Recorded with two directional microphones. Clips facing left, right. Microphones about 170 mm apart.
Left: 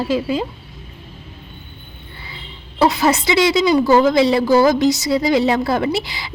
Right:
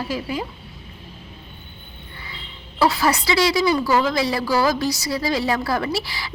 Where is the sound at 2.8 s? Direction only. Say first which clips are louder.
Left 4 dB; 20° left (ahead or behind).